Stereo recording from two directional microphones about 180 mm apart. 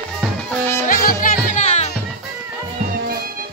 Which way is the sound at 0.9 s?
50° left (ahead or behind).